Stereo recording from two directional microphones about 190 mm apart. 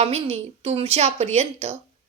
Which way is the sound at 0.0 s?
35° right (ahead or behind).